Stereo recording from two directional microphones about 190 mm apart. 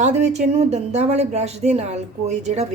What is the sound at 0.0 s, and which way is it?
Speech, 35° right (ahead or behind).